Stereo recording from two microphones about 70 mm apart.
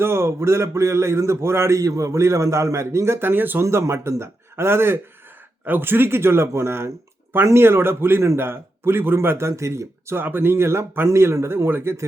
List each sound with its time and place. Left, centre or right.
0.0 s a man's voice: right
3.6 s a man's voice: right
10.2 s a man's voice: right